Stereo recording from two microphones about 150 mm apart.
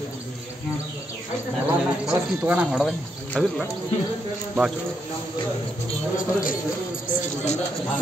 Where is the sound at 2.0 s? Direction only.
10° right (ahead or behind).